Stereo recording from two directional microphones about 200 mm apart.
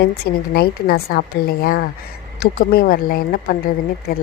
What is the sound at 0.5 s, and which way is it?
Speech, 50° left (ahead or behind).